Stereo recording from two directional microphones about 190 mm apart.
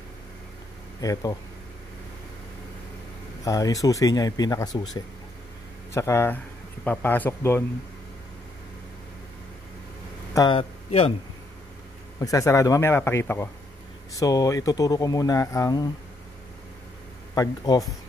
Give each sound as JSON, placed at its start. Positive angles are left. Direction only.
{"t": 1.0, "sound": "speech", "side_deg": 20}
{"t": 3.4, "sound": "speech", "side_deg": 20}
{"t": 5.9, "sound": "speech", "side_deg": 15}
{"t": 10.3, "sound": "speech", "side_deg": 25}
{"t": 12.2, "sound": "speech", "side_deg": 15}
{"t": 17.3, "sound": "speech", "side_deg": 20}